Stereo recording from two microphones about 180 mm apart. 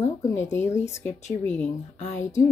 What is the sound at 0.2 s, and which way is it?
A woman's voice, 15° left (ahead or behind).